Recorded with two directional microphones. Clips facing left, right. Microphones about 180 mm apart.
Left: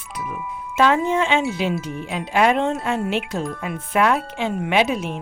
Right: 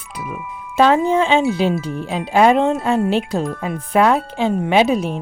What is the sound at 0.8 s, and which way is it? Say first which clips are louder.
Speech: right 4 dB; 35° right (ahead or behind).